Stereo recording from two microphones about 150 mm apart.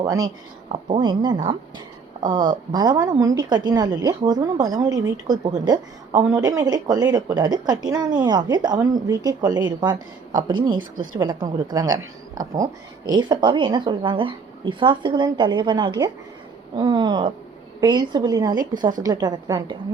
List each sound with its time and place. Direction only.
0.0 s a woman's voice: 25° right (ahead or behind)